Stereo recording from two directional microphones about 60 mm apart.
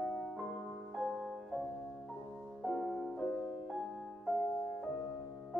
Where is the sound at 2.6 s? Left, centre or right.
Centre.